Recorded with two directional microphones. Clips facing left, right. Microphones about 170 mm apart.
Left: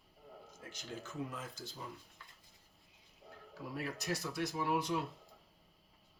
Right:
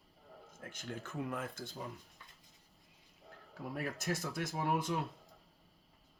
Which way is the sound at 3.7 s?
50° right (ahead or behind).